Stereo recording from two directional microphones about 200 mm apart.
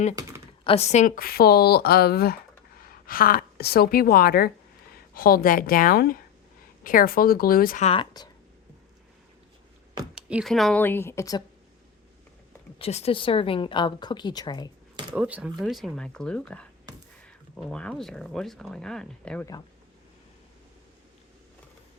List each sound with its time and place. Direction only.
0.2 s typing: 15° right (ahead or behind)
0.6 s speech: 30° left (ahead or behind); by 7.9 s 45° left (ahead or behind)
7.9 s a woman's voice: 25° left (ahead or behind)
10.2 s speech: 5° right (ahead or behind); by 11.4 s 15° left (ahead or behind)
12.8 s a woman's voice: 30° left (ahead or behind)
15.1 s speech: 5° right (ahead or behind)